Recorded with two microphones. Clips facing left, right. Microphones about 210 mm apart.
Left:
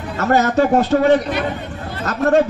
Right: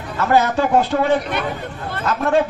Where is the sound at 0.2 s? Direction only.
45° left (ahead or behind).